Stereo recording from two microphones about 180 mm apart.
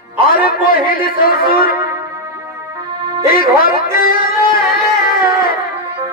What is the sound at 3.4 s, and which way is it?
Music, 55° left (ahead or behind).